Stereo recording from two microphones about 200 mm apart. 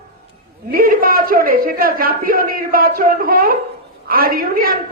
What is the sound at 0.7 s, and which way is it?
A man's voice, 45° right (ahead or behind).